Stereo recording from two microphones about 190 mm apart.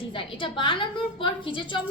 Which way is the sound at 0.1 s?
25° left (ahead or behind).